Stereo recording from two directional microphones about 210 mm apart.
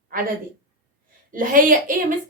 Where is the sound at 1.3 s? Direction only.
40° right (ahead or behind).